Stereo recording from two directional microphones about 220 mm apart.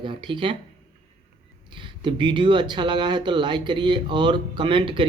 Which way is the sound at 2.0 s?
20° right (ahead or behind).